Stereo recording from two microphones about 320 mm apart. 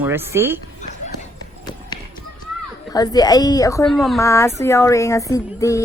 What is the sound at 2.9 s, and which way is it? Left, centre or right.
Speech, centre.